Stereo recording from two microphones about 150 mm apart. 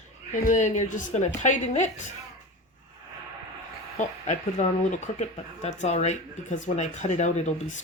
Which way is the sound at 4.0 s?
55° left (ahead or behind).